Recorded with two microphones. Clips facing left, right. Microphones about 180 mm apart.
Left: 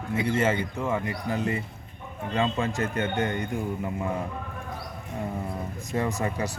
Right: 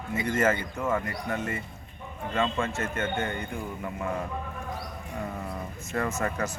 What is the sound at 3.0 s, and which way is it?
Speech, 20° left (ahead or behind).